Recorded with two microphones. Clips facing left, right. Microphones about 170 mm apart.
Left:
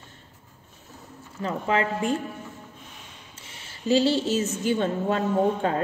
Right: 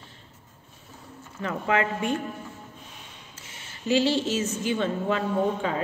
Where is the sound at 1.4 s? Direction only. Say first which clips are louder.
Left 1 dB; 30° left (ahead or behind).